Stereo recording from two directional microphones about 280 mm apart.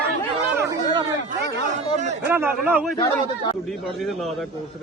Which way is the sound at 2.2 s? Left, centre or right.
Centre.